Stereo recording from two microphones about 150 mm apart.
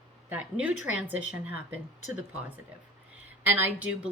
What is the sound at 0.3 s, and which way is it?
A woman's voice, 10° right (ahead or behind).